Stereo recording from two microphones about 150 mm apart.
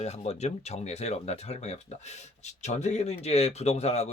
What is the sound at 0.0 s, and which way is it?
Speech, 45° left (ahead or behind).